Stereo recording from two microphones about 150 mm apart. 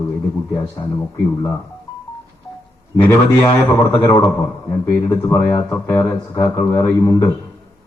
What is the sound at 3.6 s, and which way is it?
Speech, 20° left (ahead or behind).